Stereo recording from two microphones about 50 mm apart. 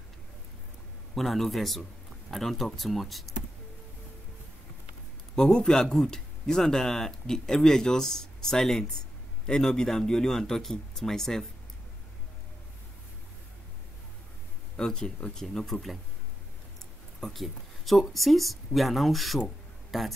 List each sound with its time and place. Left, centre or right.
1.1 s speech: centre
5.3 s speech: centre
14.8 s speech: centre
17.2 s speech: centre